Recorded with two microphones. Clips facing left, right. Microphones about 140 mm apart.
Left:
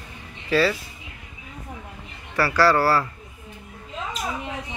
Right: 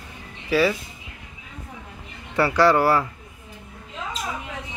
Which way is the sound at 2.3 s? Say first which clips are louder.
Right 1 dB; 20° right (ahead or behind).